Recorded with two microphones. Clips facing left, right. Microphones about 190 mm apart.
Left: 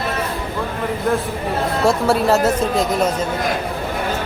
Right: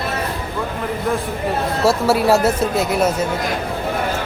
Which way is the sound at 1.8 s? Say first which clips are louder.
Right 1 dB; 5° right (ahead or behind).